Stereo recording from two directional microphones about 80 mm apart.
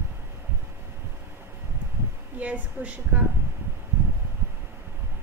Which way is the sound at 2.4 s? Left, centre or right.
Centre.